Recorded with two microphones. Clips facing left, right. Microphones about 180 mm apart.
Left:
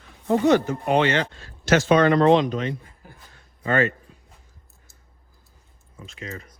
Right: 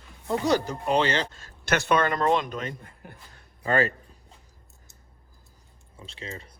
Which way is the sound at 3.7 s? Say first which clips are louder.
Left 2 dB; 40° right (ahead or behind).